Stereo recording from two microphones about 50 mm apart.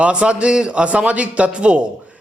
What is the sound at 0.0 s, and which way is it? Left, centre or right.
A man's voice, right.